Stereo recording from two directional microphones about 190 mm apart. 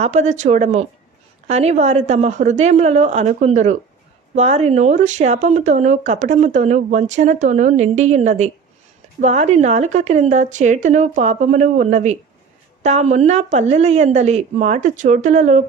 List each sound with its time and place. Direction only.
0.0 s speech: 35° right (ahead or behind)